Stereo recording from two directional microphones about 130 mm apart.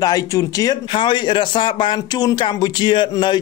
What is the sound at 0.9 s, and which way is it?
Speech, 35° left (ahead or behind).